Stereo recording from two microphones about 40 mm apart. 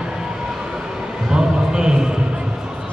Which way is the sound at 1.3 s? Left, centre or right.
Right.